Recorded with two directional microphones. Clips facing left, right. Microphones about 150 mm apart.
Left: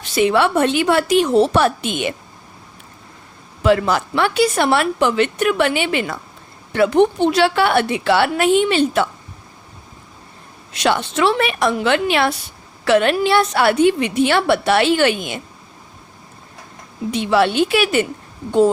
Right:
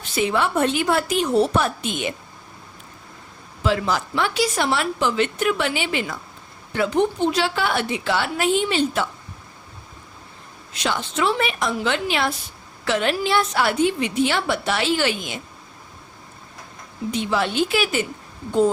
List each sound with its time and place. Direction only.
0.0 s a woman's voice: 75° left (ahead or behind)
3.6 s a woman's voice: 60° left (ahead or behind)
10.8 s a woman's voice: 70° left (ahead or behind)
17.1 s a woman's voice: 70° left (ahead or behind)